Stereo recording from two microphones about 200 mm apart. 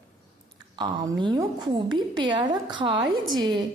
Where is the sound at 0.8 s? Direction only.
20° right (ahead or behind).